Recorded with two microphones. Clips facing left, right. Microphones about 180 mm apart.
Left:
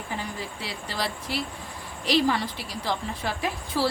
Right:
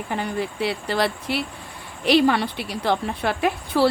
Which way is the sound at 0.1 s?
65° right (ahead or behind).